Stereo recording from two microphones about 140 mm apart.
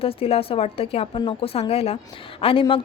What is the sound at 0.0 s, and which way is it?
A woman's voice, 45° left (ahead or behind).